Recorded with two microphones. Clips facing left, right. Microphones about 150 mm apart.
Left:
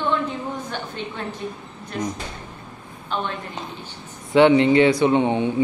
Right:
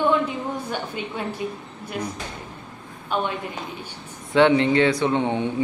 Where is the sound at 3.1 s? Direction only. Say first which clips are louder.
Right 2 dB; 10° right (ahead or behind).